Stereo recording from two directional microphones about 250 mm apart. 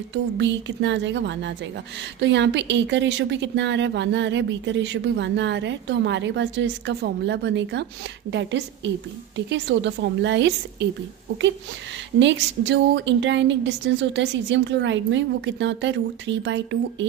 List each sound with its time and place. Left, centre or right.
0.1 s a woman's voice: right
12.2 s a woman's voice: right